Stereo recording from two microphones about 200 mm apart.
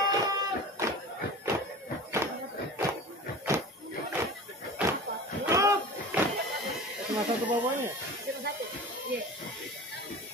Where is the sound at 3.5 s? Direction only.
15° right (ahead or behind).